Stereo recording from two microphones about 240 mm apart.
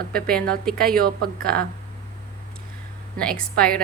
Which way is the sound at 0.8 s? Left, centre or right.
Right.